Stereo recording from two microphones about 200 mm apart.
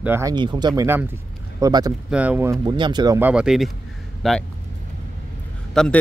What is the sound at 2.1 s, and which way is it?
Speech, 5° right (ahead or behind).